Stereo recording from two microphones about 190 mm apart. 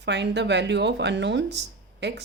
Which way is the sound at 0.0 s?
65° right (ahead or behind).